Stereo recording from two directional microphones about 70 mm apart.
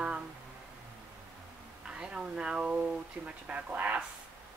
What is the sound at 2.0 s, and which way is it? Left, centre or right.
Speech, centre.